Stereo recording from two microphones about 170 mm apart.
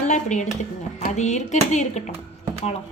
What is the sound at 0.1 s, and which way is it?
A woman's voice, 45° left (ahead or behind).